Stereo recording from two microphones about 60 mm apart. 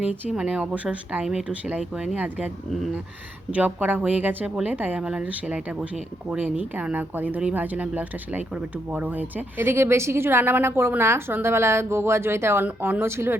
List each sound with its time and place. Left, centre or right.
0.3 s speech: centre
3.5 s speech: right
4.9 s speech: centre
9.6 s a woman's voice: right